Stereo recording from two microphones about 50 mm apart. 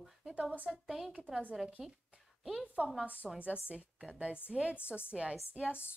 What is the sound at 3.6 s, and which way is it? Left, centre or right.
A woman's voice, right.